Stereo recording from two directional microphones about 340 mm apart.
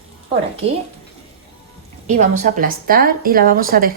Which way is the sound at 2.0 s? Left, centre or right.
Right.